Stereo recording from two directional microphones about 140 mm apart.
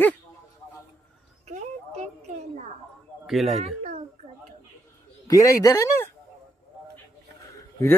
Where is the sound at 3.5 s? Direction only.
50° right (ahead or behind).